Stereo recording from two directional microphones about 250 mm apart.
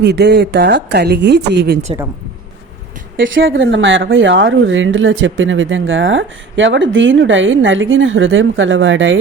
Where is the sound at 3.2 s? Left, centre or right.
Right.